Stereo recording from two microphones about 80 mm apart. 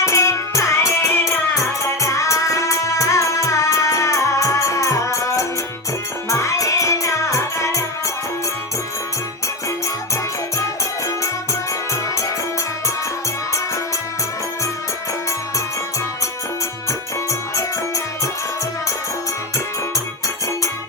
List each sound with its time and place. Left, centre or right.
0.0 s music: left
17.5 s music: left